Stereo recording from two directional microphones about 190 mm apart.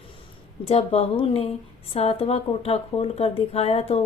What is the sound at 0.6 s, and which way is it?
Speech, 35° left (ahead or behind).